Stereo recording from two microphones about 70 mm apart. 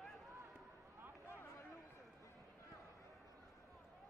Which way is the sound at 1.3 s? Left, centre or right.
Left.